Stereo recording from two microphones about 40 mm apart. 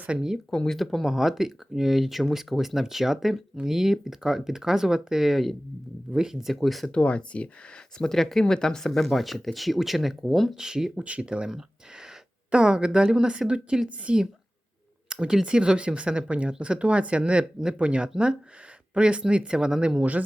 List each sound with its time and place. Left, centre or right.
0.5 s speech: centre
0.8 s speech: centre
1.0 s speech: centre
6.1 s speech: centre
6.5 s speech: centre
6.9 s speech: left
7.9 s speech: centre
10.5 s speech: centre
11.0 s speech: right
20.0 s speech: right